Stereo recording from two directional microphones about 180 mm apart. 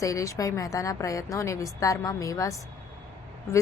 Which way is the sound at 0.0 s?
15° left (ahead or behind).